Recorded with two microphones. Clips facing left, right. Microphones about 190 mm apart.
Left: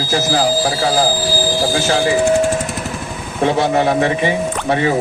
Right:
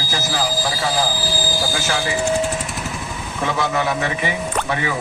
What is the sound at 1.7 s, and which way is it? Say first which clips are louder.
Speech: left 7 dB; 30° left (ahead or behind).